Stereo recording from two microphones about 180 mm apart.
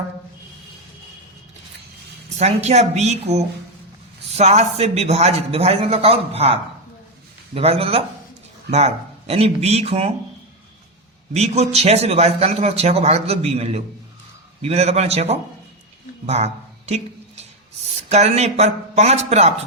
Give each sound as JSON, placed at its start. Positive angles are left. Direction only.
{"t": 2.4, "sound": "a man's voice", "side_deg": -40}
{"t": 11.3, "sound": "a man's voice", "side_deg": -35}
{"t": 16.2, "sound": "a sound", "side_deg": -35}
{"t": 18.1, "sound": "a man's voice", "side_deg": -40}